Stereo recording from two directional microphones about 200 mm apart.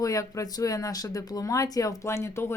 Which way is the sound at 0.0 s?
15° left (ahead or behind).